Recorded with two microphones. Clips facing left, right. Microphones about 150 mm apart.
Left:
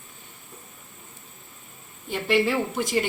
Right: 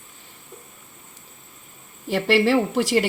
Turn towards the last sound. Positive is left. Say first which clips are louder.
# right 5 dB
turn(degrees=-80)